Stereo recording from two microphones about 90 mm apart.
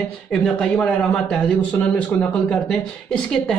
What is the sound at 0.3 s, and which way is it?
Speech, 10° left (ahead or behind).